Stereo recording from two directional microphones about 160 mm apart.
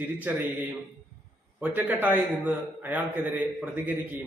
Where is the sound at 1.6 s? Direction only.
10° right (ahead or behind).